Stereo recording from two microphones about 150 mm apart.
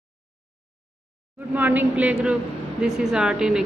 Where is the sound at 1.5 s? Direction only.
10° right (ahead or behind).